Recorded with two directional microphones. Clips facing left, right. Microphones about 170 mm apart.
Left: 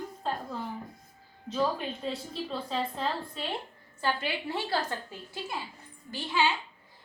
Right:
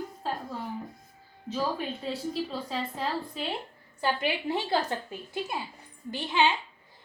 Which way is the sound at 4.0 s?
15° right (ahead or behind).